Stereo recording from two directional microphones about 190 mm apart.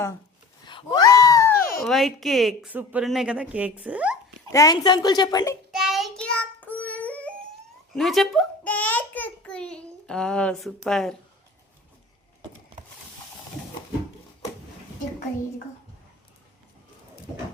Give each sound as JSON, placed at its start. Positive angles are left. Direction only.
{"t": 0.7, "sound": "a sound", "side_deg": 25}
{"t": 1.5, "sound": "a sound", "side_deg": 50}
{"t": 1.8, "sound": "speech", "side_deg": 0}
{"t": 4.5, "sound": "a woman's voice", "side_deg": 20}
{"t": 5.7, "sound": "child singing", "side_deg": 0}
{"t": 7.9, "sound": "a child's voice", "side_deg": 0}